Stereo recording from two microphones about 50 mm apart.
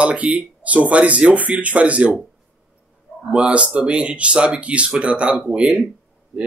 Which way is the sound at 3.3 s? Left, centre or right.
Right.